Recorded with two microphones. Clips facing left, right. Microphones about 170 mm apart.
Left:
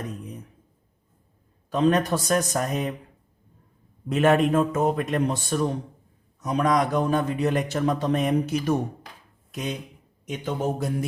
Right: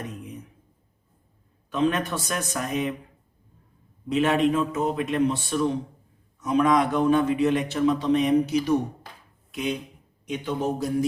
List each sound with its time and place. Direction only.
1.7 s a man's voice: 40° left (ahead or behind)
4.1 s a man's voice: 50° left (ahead or behind)
10.2 s a man's voice: 50° left (ahead or behind)